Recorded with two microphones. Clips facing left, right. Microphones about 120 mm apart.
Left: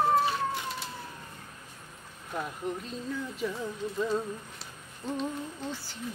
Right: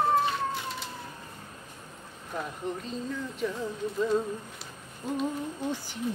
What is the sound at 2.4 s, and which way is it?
Speech, 5° left (ahead or behind).